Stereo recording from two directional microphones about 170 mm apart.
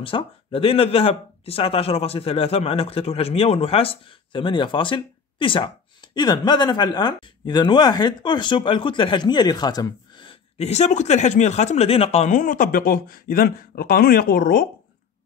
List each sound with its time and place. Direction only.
0.0 s speech: 30° left (ahead or behind); by 14.7 s 60° left (ahead or behind)